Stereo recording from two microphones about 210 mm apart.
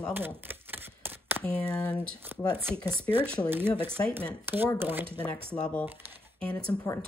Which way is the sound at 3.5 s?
10° right (ahead or behind).